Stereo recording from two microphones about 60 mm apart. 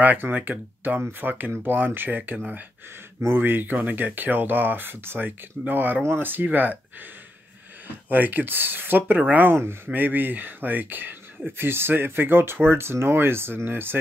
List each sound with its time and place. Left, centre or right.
0.0 s speech: right
8.1 s speech: right